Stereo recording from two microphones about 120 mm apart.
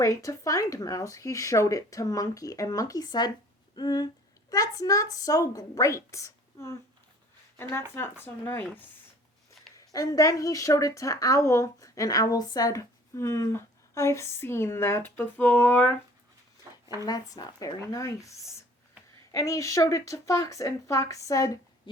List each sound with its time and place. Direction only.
0.0 s a woman's voice: 25° left (ahead or behind)
9.7 s a woman's voice: 30° left (ahead or behind); by 15.8 s 15° left (ahead or behind)
16.7 s a sound: 25° right (ahead or behind)
17.0 s a woman's voice: 30° left (ahead or behind)